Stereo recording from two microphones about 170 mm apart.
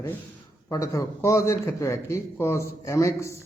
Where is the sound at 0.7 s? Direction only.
20° left (ahead or behind).